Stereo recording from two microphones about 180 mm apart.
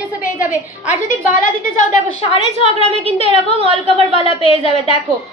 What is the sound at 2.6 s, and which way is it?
A woman's voice, 35° right (ahead or behind).